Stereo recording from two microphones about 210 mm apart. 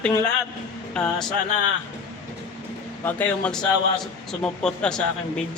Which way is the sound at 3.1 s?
5° left (ahead or behind).